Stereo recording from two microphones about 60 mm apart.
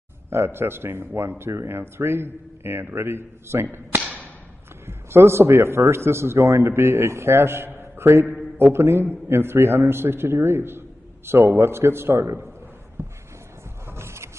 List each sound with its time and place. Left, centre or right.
0.3 s a man's voice: right
4.8 s a man's voice: right
13.0 s a sound: right
13.8 s vehicle: right